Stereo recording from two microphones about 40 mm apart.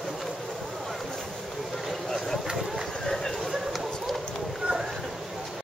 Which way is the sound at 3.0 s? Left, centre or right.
Centre.